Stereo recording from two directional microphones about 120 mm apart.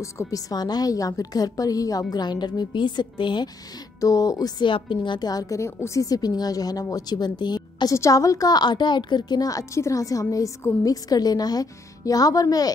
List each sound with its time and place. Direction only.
0.0 s a woman's voice: 25° left (ahead or behind)
4.0 s a woman's voice: 30° left (ahead or behind)
7.9 s a woman's voice: 25° left (ahead or behind)